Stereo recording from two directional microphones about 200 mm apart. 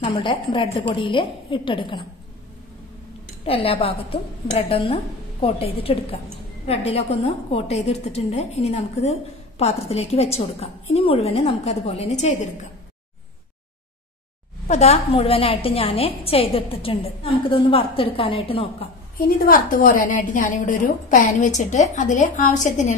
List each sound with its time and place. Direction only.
0.0 s a woman's voice: 25° left (ahead or behind)
3.4 s a woman's voice: 30° left (ahead or behind)
14.7 s a woman's voice: 30° left (ahead or behind)
19.1 s a woman's voice: 45° left (ahead or behind)